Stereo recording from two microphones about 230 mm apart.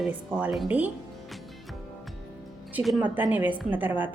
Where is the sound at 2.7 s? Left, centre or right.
Centre.